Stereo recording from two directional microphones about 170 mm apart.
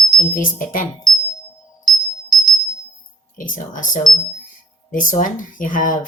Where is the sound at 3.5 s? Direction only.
50° left (ahead or behind).